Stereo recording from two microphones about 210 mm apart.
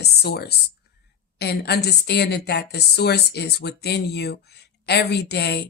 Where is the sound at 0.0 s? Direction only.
50° left (ahead or behind).